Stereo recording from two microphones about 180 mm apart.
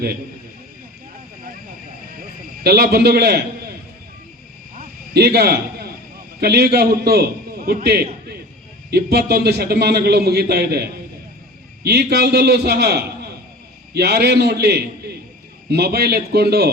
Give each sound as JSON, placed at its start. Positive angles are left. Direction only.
{"t": 2.6, "sound": "a man's voice", "side_deg": -60}
{"t": 5.1, "sound": "a man's voice", "side_deg": -60}